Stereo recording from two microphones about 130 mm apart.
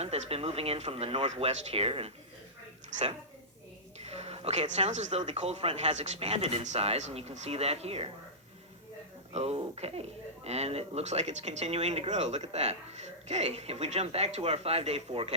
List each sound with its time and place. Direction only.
0.0 s speech: 50° right (ahead or behind)
4.0 s speech: 55° right (ahead or behind)
9.3 s speech: 55° right (ahead or behind)